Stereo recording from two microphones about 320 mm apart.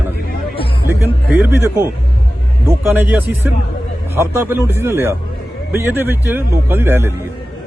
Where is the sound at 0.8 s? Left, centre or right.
Centre.